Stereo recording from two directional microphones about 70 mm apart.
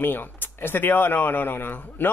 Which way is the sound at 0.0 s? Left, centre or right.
Left.